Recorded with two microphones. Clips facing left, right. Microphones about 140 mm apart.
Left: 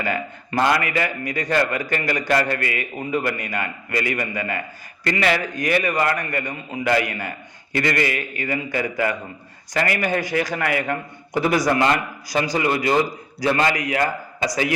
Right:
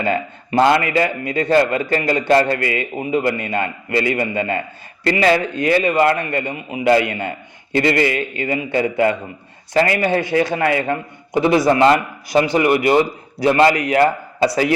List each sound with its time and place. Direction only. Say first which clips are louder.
0.0 s a man's voice: right 5 dB; 25° right (ahead or behind)